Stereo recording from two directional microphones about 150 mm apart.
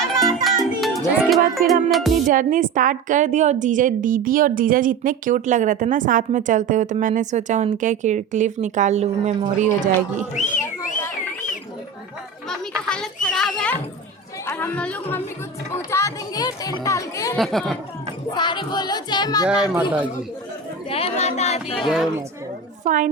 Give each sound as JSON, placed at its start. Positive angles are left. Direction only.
{"t": 0.4, "sound": "music", "side_deg": 0}
{"t": 2.2, "sound": "a woman's voice", "side_deg": -65}
{"t": 10.3, "sound": "speech", "side_deg": 55}
{"t": 12.5, "sound": "a child's voice", "side_deg": 5}
{"t": 13.2, "sound": "a sound", "side_deg": 5}
{"t": 14.4, "sound": "speech", "side_deg": 15}
{"t": 17.3, "sound": "speech", "side_deg": 0}
{"t": 18.3, "sound": "speech", "side_deg": 30}
{"t": 20.9, "sound": "speech", "side_deg": 45}
{"t": 21.8, "sound": "speech", "side_deg": 0}
{"t": 22.8, "sound": "a woman's voice", "side_deg": -60}